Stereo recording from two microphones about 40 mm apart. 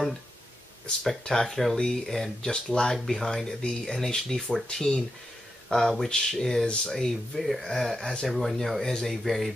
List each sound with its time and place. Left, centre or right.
1.2 s speech: centre
2.5 s speech: left
2.9 s speech: centre
5.8 s speech: centre
7.3 s speech: centre
8.0 s speech: centre
8.8 s speech: centre
9.2 s speech: centre